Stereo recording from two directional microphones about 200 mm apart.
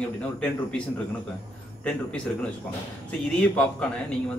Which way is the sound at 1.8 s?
5° left (ahead or behind).